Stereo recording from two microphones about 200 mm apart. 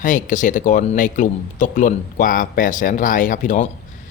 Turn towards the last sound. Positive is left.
turn(degrees=40)  # may be behind; listen again after turning